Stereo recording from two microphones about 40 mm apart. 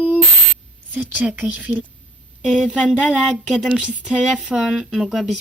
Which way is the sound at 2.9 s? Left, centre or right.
Left.